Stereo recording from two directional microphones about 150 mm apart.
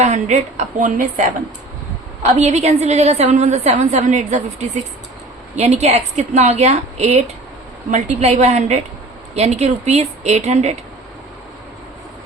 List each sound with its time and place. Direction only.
0.0 s a woman's voice: 50° right (ahead or behind)
2.4 s a woman's voice: 50° right (ahead or behind)